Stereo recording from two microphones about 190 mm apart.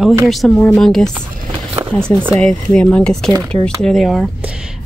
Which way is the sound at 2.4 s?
5° left (ahead or behind).